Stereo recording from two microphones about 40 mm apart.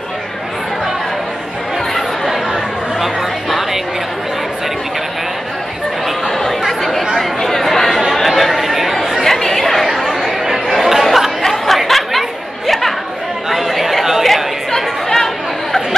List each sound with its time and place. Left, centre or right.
3.0 s music: centre
6.2 s chatter: centre
9.2 s chatter: centre
14.7 s chatter: centre